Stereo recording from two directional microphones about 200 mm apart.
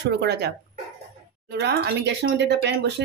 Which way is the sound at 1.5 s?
55° right (ahead or behind).